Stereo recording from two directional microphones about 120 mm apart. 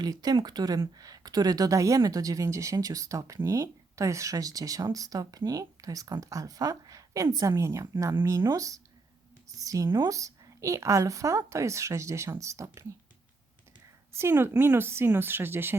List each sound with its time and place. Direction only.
0.0 s speech: 35° right (ahead or behind)
14.2 s speech: 20° right (ahead or behind)